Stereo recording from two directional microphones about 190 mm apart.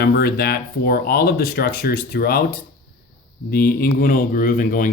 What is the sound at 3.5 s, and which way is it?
Speech, 50° left (ahead or behind).